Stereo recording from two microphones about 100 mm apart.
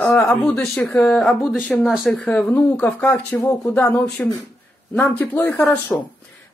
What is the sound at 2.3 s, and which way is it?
Speech, 10° left (ahead or behind).